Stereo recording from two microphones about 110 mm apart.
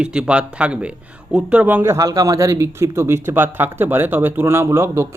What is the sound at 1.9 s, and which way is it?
Speech, 30° right (ahead or behind).